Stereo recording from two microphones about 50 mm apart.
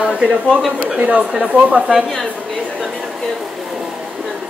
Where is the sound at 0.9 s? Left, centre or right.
Right.